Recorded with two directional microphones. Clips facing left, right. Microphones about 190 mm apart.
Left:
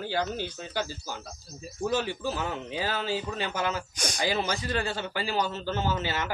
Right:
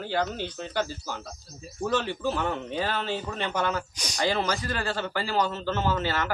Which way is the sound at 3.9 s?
50° left (ahead or behind).